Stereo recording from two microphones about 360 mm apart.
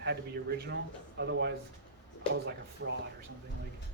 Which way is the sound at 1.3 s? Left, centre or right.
Right.